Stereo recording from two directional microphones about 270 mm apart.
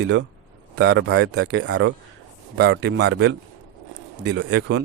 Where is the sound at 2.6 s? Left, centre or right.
Right.